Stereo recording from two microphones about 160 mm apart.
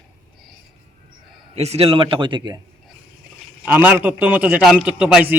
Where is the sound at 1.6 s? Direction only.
40° right (ahead or behind).